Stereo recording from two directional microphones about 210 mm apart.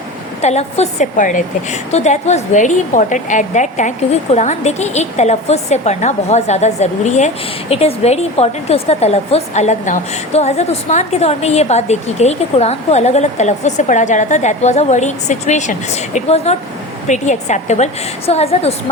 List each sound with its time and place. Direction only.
0.4 s a woman's voice: 30° left (ahead or behind)